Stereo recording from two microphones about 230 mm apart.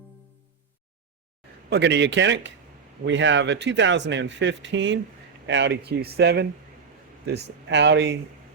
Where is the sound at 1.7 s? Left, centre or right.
Right.